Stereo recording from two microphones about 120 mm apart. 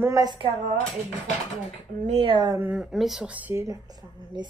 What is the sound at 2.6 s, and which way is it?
Speech, 5° right (ahead or behind).